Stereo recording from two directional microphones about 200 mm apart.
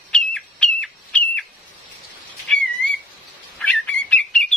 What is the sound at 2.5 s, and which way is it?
Bird, 5° left (ahead or behind).